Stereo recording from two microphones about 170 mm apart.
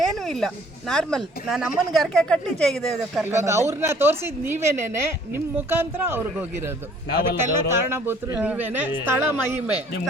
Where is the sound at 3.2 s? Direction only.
15° right (ahead or behind).